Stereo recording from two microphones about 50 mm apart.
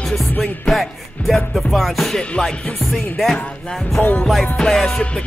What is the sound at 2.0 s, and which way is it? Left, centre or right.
Music, centre.